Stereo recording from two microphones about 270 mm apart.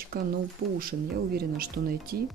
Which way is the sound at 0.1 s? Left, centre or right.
Right.